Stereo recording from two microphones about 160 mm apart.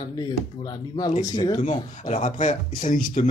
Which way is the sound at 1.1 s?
45° left (ahead or behind).